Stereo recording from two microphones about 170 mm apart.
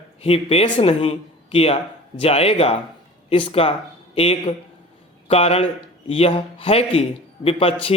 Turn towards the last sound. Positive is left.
turn(degrees=35)  # may be behind; listen again after turning